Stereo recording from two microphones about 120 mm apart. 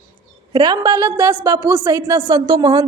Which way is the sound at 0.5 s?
35° right (ahead or behind).